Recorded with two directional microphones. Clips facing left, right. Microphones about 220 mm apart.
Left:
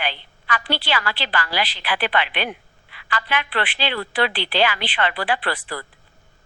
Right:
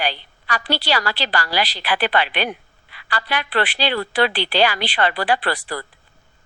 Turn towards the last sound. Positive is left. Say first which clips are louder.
# right 3 dB
turn(degrees=-40)  # may be behind; listen again after turning